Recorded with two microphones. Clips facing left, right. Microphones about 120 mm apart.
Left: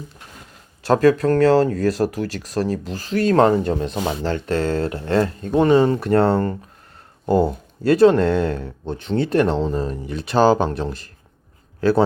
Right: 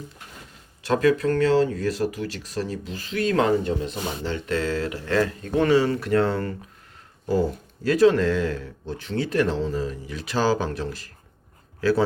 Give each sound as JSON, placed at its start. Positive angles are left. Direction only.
{"t": 0.9, "sound": "speech", "side_deg": 40}
{"t": 4.4, "sound": "speech", "side_deg": 35}
{"t": 7.3, "sound": "speech", "side_deg": 60}
{"t": 7.9, "sound": "speech", "side_deg": 30}
{"t": 9.6, "sound": "speech", "side_deg": 50}
{"t": 9.9, "sound": "a man's voice", "side_deg": 30}